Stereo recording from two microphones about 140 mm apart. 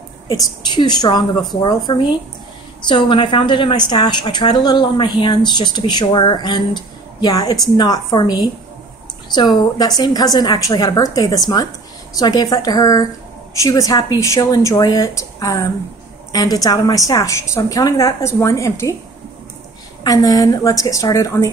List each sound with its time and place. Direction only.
0.3 s a woman's voice: 30° left (ahead or behind)
2.9 s a woman's voice: 35° left (ahead or behind)
20.0 s a woman's voice: 25° left (ahead or behind)